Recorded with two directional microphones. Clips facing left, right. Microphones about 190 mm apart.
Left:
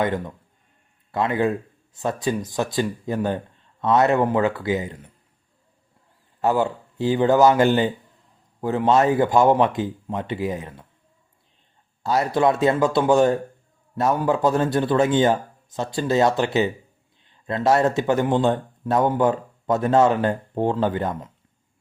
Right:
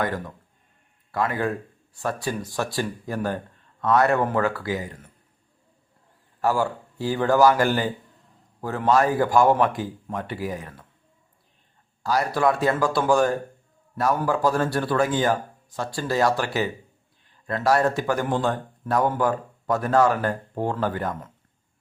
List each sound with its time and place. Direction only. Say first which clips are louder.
0.0 s speech: left 4 dB; 20° left (ahead or behind)
6.4 s speech: left 2 dB; 20° left (ahead or behind)
12.0 s a man's voice: left 2 dB; 25° left (ahead or behind)